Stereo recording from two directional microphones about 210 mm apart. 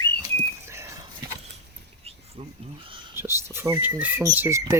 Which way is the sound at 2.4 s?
30° right (ahead or behind).